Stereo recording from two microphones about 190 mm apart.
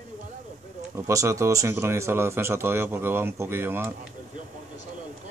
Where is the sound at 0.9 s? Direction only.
15° right (ahead or behind).